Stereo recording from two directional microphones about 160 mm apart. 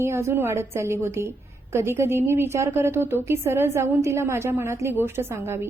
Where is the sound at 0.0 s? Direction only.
15° right (ahead or behind).